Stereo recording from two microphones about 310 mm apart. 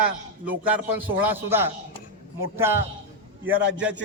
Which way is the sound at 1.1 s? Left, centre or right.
Centre.